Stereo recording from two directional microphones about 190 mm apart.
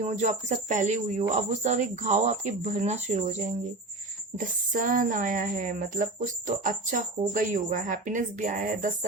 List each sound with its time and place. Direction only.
0.0 s speech: 40° right (ahead or behind)